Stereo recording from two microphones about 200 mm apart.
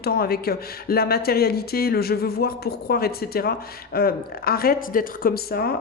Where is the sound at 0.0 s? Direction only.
50° left (ahead or behind).